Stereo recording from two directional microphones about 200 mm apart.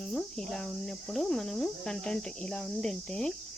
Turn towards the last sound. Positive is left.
turn(degrees=5)  # may be behind; listen again after turning